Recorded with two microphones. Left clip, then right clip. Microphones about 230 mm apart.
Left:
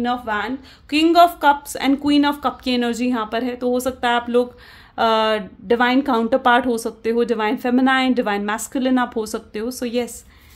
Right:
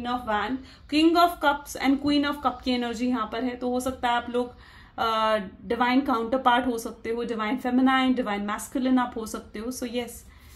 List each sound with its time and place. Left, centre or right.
0.0 s speech: left